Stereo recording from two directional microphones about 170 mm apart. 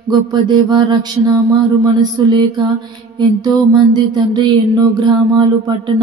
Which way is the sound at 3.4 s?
25° right (ahead or behind).